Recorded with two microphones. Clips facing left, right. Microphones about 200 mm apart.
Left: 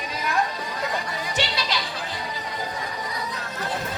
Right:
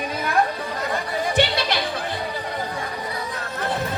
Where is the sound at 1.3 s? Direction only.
55° right (ahead or behind).